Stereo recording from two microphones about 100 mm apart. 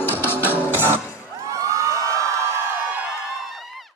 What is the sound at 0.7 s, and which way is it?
Music, 20° right (ahead or behind).